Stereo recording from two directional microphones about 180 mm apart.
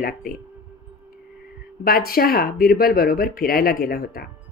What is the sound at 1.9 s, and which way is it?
Speech, 55° left (ahead or behind).